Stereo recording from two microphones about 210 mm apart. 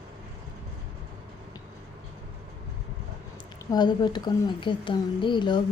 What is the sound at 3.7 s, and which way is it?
A woman's voice, 20° left (ahead or behind).